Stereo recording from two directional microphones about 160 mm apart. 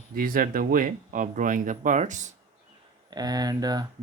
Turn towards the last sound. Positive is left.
turn(degrees=-25)  # may be behind; listen again after turning